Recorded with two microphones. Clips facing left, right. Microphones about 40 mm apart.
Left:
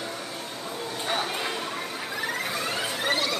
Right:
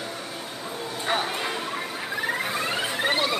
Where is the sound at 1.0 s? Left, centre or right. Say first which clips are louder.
Right 3 dB; centre.